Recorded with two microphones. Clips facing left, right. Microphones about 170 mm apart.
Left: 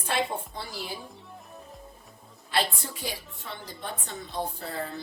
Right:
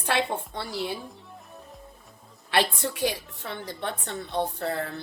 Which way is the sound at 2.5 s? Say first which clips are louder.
Right 4 dB; 75° right (ahead or behind).